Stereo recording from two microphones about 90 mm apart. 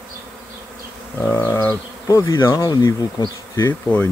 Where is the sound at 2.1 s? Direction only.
40° left (ahead or behind).